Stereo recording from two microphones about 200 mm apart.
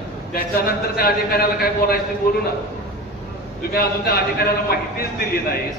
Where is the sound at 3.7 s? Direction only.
50° left (ahead or behind).